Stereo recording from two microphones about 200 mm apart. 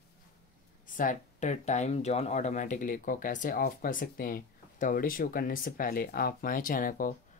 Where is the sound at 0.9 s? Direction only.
40° left (ahead or behind).